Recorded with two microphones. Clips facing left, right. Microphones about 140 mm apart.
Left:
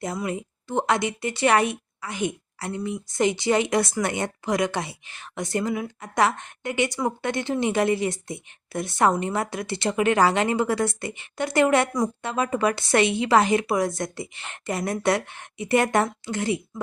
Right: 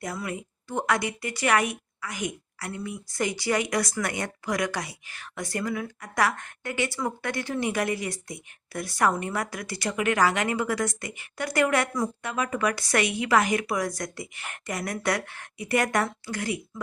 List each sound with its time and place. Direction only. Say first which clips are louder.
0.0 s a woman's voice: left 4 dB; 25° left (ahead or behind)